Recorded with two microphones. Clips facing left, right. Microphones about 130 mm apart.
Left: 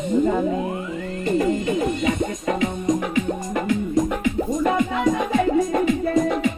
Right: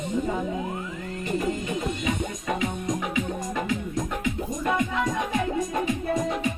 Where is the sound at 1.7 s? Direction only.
65° left (ahead or behind).